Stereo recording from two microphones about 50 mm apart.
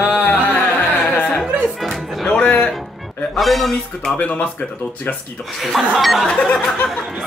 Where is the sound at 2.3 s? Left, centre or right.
Left.